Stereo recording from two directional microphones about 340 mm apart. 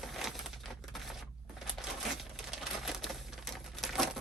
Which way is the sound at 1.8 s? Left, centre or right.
Centre.